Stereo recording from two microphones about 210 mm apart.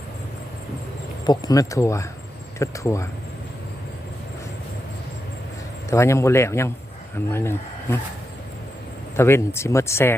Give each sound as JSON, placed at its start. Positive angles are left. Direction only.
{"t": 1.2, "sound": "speech", "side_deg": 20}
{"t": 5.9, "sound": "speech", "side_deg": 15}
{"t": 9.1, "sound": "speech", "side_deg": 10}